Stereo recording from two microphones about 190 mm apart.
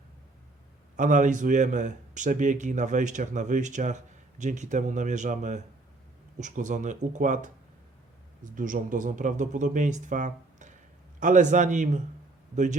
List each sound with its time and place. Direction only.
0.9 s speech: 40° right (ahead or behind)